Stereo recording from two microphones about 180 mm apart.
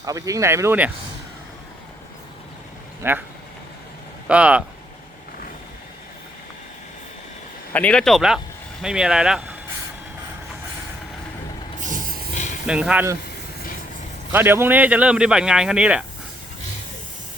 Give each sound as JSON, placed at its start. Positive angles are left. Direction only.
{"t": 0.0, "sound": "speech", "side_deg": -20}
{"t": 3.0, "sound": "speech", "side_deg": -10}
{"t": 4.3, "sound": "speech", "side_deg": -5}
{"t": 7.7, "sound": "speech", "side_deg": 5}
{"t": 11.8, "sound": "vehicle", "side_deg": -45}
{"t": 12.6, "sound": "speech", "side_deg": -5}
{"t": 14.3, "sound": "speech", "side_deg": -10}